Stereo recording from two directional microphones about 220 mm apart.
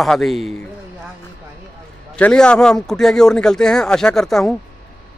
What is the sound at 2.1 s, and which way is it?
Speech, 5° left (ahead or behind).